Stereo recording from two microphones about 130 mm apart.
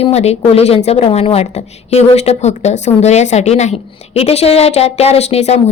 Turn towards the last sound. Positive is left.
turn(degrees=55)  # may be behind; listen again after turning